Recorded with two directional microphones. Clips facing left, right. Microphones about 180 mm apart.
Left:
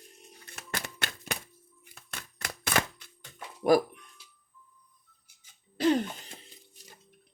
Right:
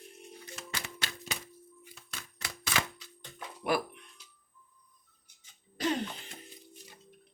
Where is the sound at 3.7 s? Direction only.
40° left (ahead or behind).